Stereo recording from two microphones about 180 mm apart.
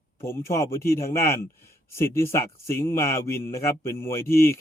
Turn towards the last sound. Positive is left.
turn(degrees=15)  # may be behind; listen again after turning